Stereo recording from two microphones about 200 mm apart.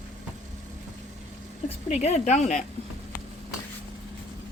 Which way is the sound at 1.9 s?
35° left (ahead or behind).